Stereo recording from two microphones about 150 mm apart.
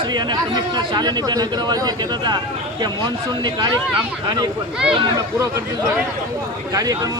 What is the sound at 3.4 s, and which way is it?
Speech, 30° right (ahead or behind).